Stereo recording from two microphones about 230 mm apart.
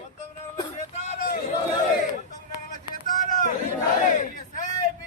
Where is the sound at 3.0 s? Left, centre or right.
Left.